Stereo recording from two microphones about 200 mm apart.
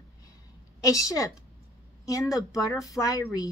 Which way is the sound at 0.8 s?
15° left (ahead or behind).